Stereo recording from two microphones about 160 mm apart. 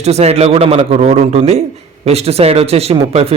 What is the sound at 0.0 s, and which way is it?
A man's voice, 40° right (ahead or behind).